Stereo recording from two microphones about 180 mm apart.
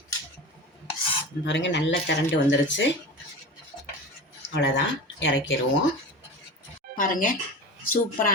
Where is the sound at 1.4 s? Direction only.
80° left.